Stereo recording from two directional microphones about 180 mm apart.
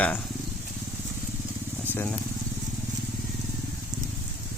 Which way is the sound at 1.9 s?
10° left (ahead or behind).